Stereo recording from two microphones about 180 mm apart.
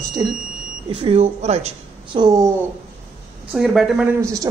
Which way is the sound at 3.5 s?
5° right (ahead or behind).